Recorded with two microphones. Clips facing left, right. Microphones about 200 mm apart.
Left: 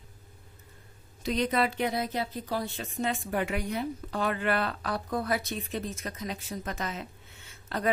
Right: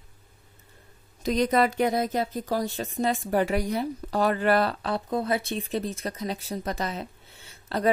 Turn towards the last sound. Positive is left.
turn(degrees=-30)  # may be behind; listen again after turning